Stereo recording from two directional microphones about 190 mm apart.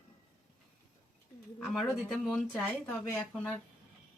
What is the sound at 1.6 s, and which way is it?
Speech, centre (ahead or behind).